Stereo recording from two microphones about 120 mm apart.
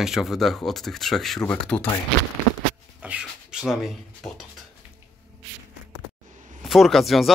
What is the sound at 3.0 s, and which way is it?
Writing, 10° right (ahead or behind).